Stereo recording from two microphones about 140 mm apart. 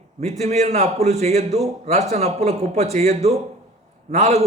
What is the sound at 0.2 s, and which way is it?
A man's voice, 50° right (ahead or behind).